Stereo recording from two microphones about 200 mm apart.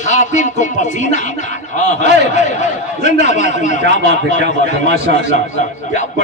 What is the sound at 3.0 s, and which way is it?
A man's voice, 35° left (ahead or behind).